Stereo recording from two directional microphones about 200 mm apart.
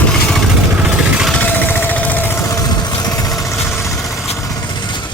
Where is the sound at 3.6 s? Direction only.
Centre (ahead or behind).